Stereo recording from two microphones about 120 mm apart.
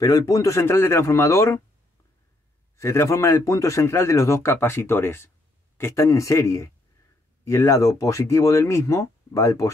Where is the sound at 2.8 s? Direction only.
25° left (ahead or behind).